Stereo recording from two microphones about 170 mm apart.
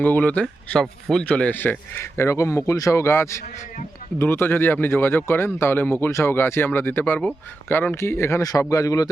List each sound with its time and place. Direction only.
0.0 s speech: 10° left (ahead or behind)